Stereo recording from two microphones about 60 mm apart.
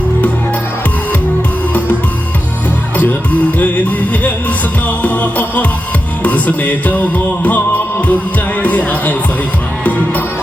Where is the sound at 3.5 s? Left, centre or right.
Left.